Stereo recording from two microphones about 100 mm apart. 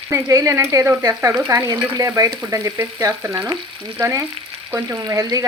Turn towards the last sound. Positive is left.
turn(degrees=-35)  # may be behind; listen again after turning